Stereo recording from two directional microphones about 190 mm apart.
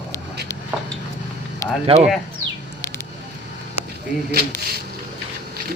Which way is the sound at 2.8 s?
15° left (ahead or behind).